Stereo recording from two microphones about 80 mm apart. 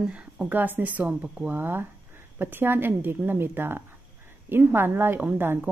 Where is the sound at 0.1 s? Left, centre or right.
Centre.